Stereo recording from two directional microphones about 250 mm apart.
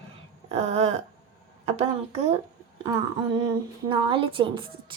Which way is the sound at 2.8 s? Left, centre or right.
Centre.